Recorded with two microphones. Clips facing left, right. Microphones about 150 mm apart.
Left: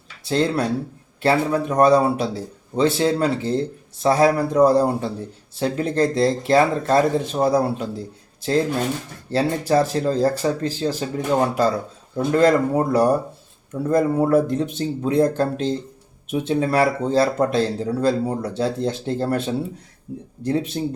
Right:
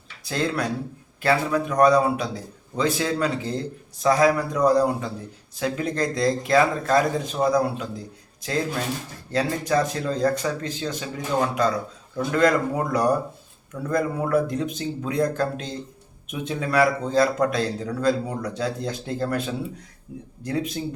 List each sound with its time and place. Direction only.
0.3 s speech: 30° left (ahead or behind)
20.4 s speech: 30° left (ahead or behind)